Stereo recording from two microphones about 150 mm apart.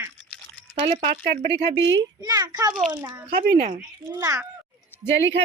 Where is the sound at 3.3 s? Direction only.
90° right.